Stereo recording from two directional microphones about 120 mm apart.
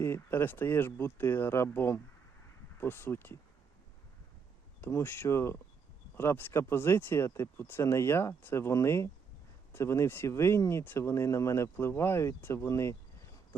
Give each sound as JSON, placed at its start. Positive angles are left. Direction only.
{"t": 0.0, "sound": "speech", "side_deg": 20}
{"t": 4.8, "sound": "speech", "side_deg": 20}